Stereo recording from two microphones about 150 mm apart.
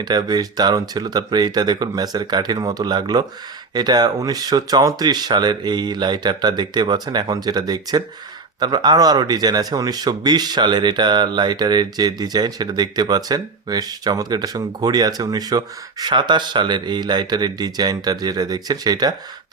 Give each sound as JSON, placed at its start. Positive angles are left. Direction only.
{"t": 0.0, "sound": "speech", "side_deg": -30}